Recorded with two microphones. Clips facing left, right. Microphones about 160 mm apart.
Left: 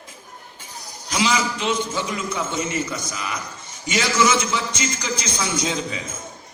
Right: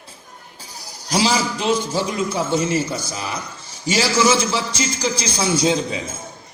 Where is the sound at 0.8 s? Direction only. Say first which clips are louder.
Right 4 dB; 35° right (ahead or behind).